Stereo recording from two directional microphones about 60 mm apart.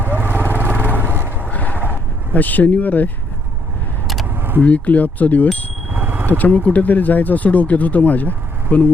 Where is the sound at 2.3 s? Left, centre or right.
Left.